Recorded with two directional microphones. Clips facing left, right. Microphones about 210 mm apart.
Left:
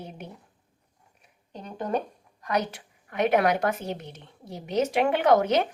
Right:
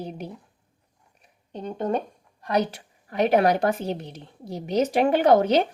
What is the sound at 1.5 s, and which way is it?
A woman's voice, 30° right (ahead or behind).